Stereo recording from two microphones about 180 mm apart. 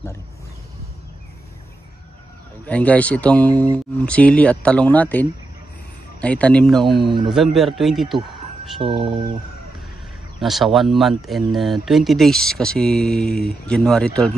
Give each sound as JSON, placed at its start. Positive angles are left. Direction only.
{"t": 2.6, "sound": "speech", "side_deg": 10}
{"t": 8.8, "sound": "speech", "side_deg": -30}
{"t": 10.4, "sound": "speech", "side_deg": 0}